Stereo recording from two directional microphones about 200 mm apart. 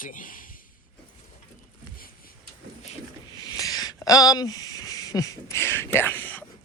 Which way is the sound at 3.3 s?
20° left (ahead or behind).